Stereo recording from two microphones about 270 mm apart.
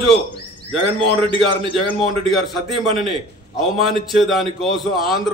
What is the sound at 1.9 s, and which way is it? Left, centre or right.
A man's voice, centre.